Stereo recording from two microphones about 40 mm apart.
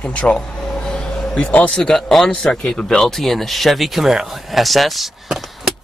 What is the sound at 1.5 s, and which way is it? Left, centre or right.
Speech, left.